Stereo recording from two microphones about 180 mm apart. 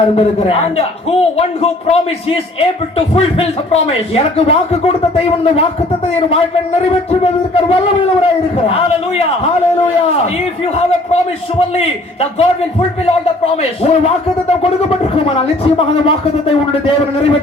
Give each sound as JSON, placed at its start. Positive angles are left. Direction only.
{"t": 0.2, "sound": "speech", "side_deg": 35}
{"t": 3.2, "sound": "speech", "side_deg": 35}
{"t": 7.1, "sound": "speech", "side_deg": 35}
{"t": 11.8, "sound": "speech", "side_deg": 35}